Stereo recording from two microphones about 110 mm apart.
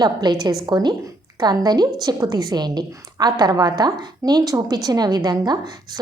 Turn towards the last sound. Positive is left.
turn(degrees=-40)  # may be behind; listen again after turning